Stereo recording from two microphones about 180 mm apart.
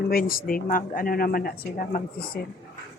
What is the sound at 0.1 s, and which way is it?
Speech, 55° left (ahead or behind).